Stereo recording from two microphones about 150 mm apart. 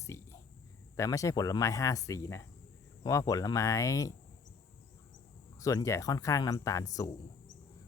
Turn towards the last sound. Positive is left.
turn(degrees=25)  # may be behind; listen again after turning